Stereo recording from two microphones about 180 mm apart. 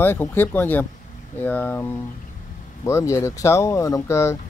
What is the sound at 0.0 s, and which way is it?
Speech, 10° left (ahead or behind).